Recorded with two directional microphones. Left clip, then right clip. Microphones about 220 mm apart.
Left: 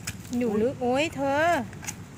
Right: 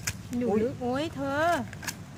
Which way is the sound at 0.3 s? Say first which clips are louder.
Left 2 dB; 10° left (ahead or behind).